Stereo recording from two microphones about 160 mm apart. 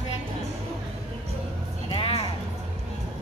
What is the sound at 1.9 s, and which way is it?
Music, 35° left (ahead or behind).